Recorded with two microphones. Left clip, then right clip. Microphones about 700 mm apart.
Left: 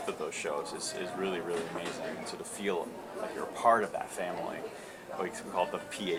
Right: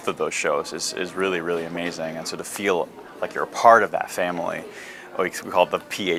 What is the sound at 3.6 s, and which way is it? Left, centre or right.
Speech, right.